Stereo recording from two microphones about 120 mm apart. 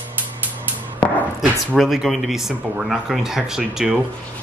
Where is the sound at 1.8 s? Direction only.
Centre (ahead or behind).